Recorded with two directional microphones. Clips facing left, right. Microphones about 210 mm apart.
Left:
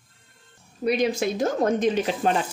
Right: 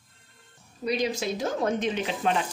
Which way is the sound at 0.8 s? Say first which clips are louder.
Left 5 dB; 55° left (ahead or behind).